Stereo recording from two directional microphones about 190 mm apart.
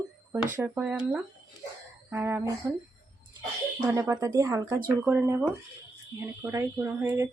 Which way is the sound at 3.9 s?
15° right (ahead or behind).